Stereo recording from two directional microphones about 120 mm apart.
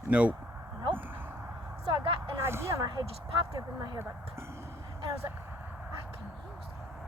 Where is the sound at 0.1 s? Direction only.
10° right (ahead or behind).